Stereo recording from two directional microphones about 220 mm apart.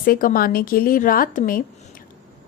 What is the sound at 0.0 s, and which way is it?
A woman's voice, 40° left (ahead or behind).